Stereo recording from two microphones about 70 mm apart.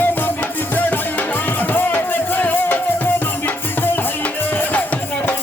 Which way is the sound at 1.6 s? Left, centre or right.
Left.